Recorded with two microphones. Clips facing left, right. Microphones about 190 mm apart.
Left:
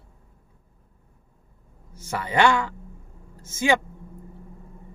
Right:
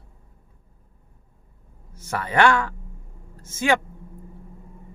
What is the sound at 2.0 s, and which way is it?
Speech, 15° left (ahead or behind).